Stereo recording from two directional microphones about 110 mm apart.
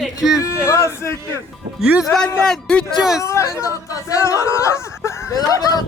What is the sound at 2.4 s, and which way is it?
Speech, 5° left (ahead or behind).